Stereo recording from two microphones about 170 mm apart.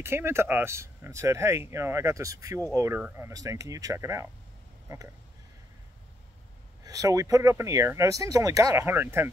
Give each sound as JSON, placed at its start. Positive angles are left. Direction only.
{"t": 0.0, "sound": "speech", "side_deg": -15}
{"t": 6.8, "sound": "speech", "side_deg": -20}